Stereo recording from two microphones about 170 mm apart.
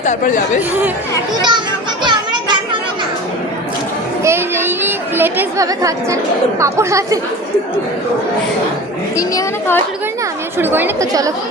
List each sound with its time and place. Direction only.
0.0 s speech: 45° left (ahead or behind)
1.4 s a child's voice: 25° right (ahead or behind)
2.0 s children playing: 25° right (ahead or behind)
4.2 s chatter: 15° right (ahead or behind)
6.6 s a woman's voice: 15° right (ahead or behind)
9.1 s a woman's voice: 15° left (ahead or behind)
10.6 s a woman's voice: 10° right (ahead or behind)